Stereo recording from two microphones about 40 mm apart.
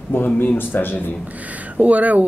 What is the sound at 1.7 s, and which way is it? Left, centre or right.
Speech, right.